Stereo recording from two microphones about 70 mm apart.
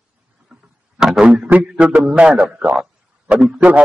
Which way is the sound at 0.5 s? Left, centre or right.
Centre.